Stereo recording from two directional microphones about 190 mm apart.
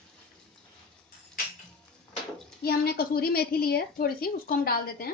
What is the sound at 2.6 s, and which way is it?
A woman's voice, 55° left (ahead or behind).